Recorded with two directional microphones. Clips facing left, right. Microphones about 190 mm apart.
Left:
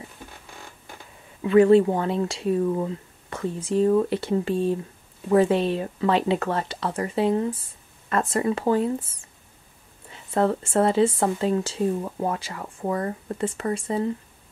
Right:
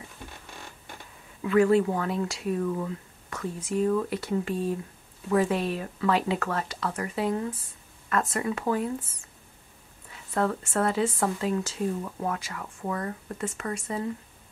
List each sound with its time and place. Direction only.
1.4 s speech: 25° left (ahead or behind)
10.1 s speech: 25° left (ahead or behind)